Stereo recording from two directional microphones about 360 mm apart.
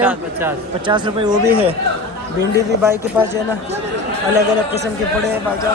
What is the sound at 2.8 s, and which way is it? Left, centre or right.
Speech, centre.